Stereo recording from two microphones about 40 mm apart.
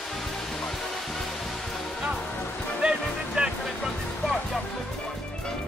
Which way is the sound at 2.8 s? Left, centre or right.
Right.